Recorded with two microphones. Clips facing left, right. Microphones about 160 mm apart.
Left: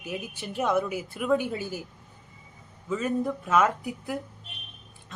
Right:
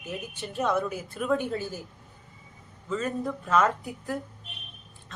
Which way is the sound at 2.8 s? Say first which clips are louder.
Left 2 dB; 5° left (ahead or behind).